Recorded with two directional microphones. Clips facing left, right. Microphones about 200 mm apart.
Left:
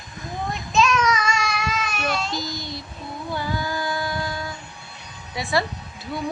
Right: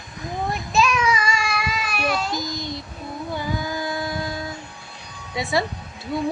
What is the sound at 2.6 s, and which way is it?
Child singing, 20° right (ahead or behind).